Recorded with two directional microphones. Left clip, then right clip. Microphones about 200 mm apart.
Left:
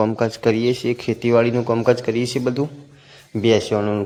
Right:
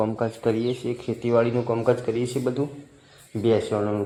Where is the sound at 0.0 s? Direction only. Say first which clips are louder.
Left 6 dB; 30° left (ahead or behind).